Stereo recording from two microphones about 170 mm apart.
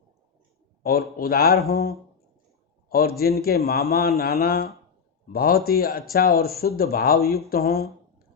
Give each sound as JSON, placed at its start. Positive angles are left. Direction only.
{"t": 0.8, "sound": "a man's voice", "side_deg": 65}